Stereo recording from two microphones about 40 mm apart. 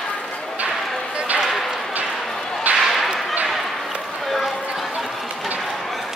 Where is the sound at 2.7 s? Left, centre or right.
Right.